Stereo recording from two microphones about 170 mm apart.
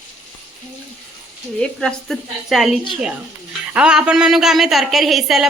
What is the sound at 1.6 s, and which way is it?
A woman's voice, 5° left (ahead or behind).